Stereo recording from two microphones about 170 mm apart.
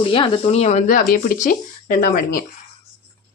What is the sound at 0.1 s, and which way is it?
Speech, 35° left (ahead or behind).